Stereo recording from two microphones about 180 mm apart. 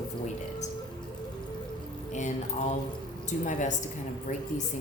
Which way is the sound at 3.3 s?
40° left (ahead or behind).